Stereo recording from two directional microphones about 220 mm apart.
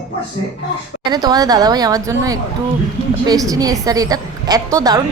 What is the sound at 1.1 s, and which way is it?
A woman's voice, 20° right (ahead or behind).